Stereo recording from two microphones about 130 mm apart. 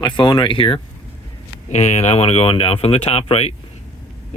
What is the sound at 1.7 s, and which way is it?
Speech, 60° left (ahead or behind).